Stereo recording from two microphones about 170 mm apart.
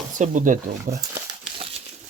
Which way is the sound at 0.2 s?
50° right (ahead or behind).